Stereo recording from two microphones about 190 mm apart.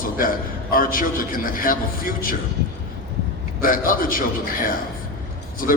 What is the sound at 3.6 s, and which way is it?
A man's voice, 45° left (ahead or behind).